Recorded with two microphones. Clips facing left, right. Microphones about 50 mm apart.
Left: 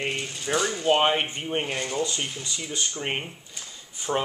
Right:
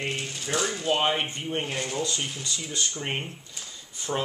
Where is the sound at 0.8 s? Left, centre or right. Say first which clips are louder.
Left 4 dB; centre.